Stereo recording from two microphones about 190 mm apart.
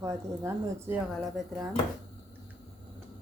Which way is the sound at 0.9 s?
5° right (ahead or behind).